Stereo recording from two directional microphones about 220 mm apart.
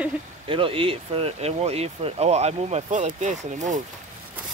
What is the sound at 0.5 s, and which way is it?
Speech, 25° right (ahead or behind).